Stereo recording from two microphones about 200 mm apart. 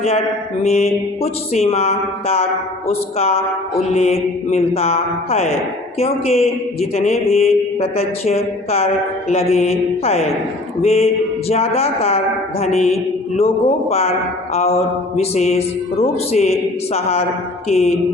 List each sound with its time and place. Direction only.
0.0 s speech: 30° left (ahead or behind)